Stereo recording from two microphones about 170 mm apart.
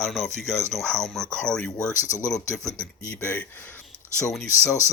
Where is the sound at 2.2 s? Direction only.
5° left (ahead or behind).